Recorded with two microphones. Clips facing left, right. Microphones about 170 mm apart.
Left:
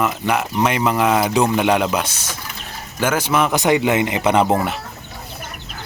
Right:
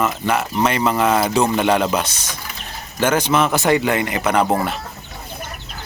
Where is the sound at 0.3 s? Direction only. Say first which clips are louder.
Even; 15° left (ahead or behind).